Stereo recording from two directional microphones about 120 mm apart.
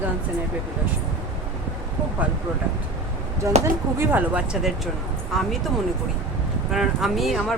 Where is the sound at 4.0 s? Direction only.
15° right (ahead or behind).